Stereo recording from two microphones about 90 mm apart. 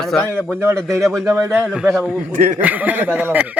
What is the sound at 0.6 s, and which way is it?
Speech, 30° right (ahead or behind).